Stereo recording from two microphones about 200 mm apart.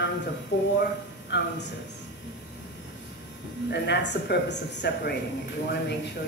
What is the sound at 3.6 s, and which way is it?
Speech, 55° left (ahead or behind).